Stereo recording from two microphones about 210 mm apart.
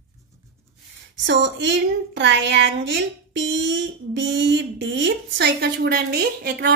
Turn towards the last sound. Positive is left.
turn(degrees=-50)  # may be behind; listen again after turning